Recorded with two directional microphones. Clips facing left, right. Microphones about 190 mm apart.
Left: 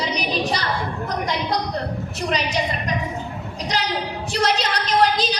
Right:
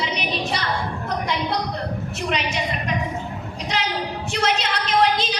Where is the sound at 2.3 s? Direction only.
35° left (ahead or behind).